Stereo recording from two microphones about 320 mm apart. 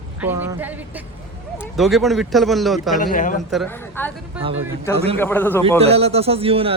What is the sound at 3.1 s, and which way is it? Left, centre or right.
Speech, left.